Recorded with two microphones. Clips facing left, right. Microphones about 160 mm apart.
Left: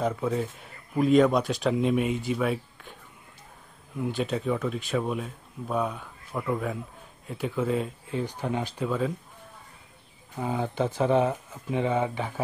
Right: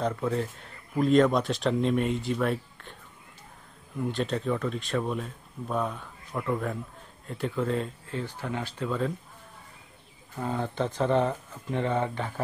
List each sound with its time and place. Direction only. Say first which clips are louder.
0.0 s speech: left 1 dB; 5° left (ahead or behind)
4.0 s speech: left 1 dB; 5° left (ahead or behind)
8.2 s speech: left 4 dB; 15° left (ahead or behind)
10.3 s speech: left 2 dB; 10° left (ahead or behind)